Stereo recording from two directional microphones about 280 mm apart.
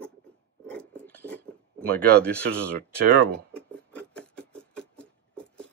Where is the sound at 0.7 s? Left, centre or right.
Centre.